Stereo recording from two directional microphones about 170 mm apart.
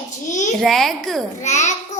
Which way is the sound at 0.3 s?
45° left (ahead or behind).